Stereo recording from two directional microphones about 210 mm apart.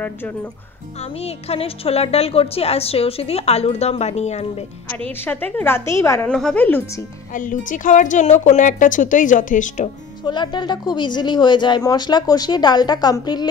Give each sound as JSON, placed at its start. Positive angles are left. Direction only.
{"t": 1.2, "sound": "speech", "side_deg": 30}
{"t": 5.0, "sound": "a woman's voice", "side_deg": 10}
{"t": 7.3, "sound": "a woman's voice", "side_deg": 40}
{"t": 10.2, "sound": "speech", "side_deg": 20}